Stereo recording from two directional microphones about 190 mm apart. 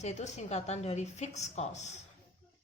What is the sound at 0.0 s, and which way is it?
A woman's voice, 35° left (ahead or behind).